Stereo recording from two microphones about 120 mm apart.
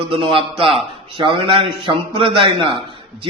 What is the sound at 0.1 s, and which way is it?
A man's voice, 50° right (ahead or behind).